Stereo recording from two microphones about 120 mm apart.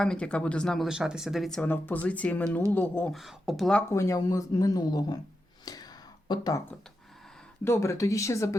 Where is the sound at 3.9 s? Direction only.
25° left (ahead or behind).